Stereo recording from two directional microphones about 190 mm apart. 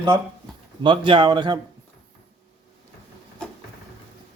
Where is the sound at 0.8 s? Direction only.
25° right (ahead or behind).